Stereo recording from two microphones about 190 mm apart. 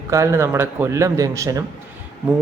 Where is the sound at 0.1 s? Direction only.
15° right (ahead or behind).